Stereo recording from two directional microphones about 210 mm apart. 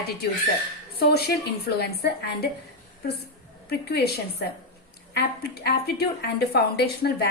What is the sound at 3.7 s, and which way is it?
A woman's voice, 50° left (ahead or behind).